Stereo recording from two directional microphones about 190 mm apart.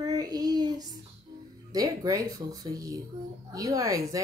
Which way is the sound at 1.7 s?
20° right (ahead or behind).